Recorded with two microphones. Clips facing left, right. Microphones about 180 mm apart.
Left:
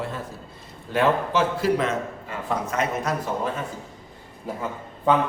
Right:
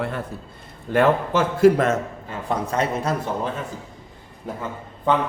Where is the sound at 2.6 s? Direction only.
30° right (ahead or behind).